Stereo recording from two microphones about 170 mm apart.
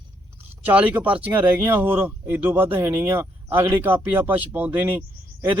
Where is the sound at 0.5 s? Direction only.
10° right (ahead or behind).